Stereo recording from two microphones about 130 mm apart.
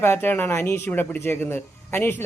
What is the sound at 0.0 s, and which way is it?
Speech, 20° left (ahead or behind).